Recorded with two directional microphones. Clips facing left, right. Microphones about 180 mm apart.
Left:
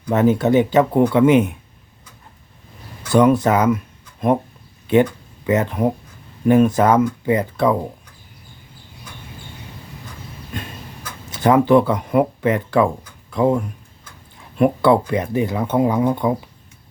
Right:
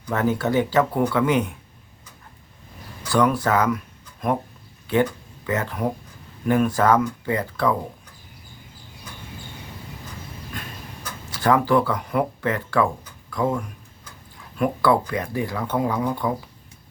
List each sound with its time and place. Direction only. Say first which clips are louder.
0.1 s speech: left 7 dB; 20° left (ahead or behind)
3.1 s speech: left 6 dB; 20° left (ahead or behind)
10.5 s a sound: left 6 dB; 25° left (ahead or behind)
11.3 s speech: left 5 dB; 20° left (ahead or behind)
14.6 s speech: left 5 dB; 25° left (ahead or behind)